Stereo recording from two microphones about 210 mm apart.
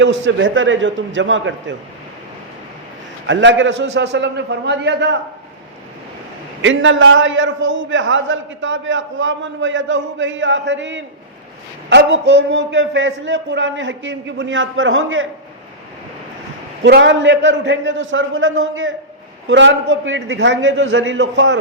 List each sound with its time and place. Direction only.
0.0 s a man's voice: 60° right (ahead or behind)
3.2 s a man's voice: 60° right (ahead or behind)
6.6 s a man's voice: 60° right (ahead or behind)
16.8 s a man's voice: 60° right (ahead or behind)